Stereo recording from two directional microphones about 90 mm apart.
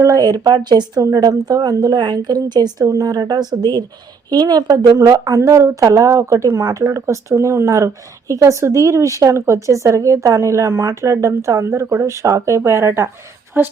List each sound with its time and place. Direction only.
0.0 s a woman's voice: 40° right (ahead or behind)
4.9 s a woman's voice: 40° right (ahead or behind); by 13.7 s 20° right (ahead or behind)